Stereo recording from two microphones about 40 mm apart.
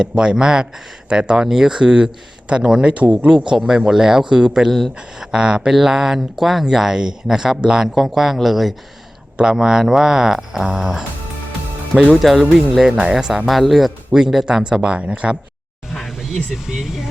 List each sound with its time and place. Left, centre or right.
0.0 s speech: right
2.9 s speech: right
3.2 s speech: centre
7.9 s speech: centre
9.4 s speech: centre
12.1 s speech: centre
13.1 s speech: centre
13.5 s speech: centre
14.1 s speech: centre
14.4 s speech: right
15.9 s a sound: centre
16.7 s speech: centre